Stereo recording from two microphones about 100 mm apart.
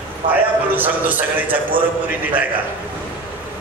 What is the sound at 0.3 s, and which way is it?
A man's voice, 15° right (ahead or behind).